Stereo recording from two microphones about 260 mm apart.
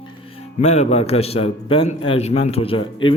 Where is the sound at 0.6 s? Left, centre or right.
Left.